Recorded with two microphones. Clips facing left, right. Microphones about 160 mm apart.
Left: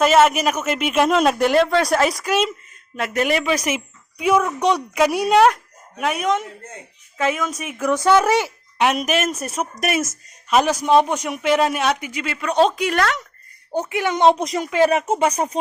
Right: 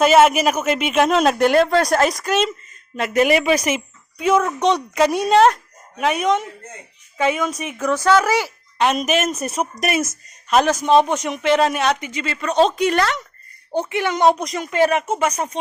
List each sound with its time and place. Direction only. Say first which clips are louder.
0.0 s speech: right 2 dB; centre (ahead or behind)
4.2 s a man's voice: right 1 dB; 15° left (ahead or behind)
8.2 s a woman's voice: left 1 dB; 20° left (ahead or behind)
8.8 s a man's voice: right 1 dB; 10° left (ahead or behind)
13.9 s a woman's voice: left 1 dB; 15° left (ahead or behind); by 15.4 s 35° left (ahead or behind)